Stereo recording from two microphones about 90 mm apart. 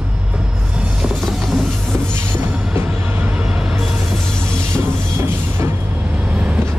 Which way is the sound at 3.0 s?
20° right (ahead or behind).